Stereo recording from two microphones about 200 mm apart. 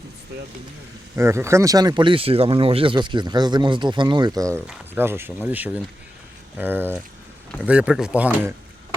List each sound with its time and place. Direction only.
0.3 s speech: 55° right (ahead or behind)
1.1 s speech: 15° right (ahead or behind)